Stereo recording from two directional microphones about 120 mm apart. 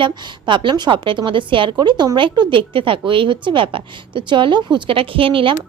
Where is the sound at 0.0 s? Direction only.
40° right (ahead or behind).